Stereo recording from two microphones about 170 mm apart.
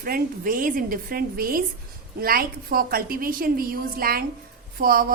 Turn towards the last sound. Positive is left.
turn(degrees=-60)  # may be behind; listen again after turning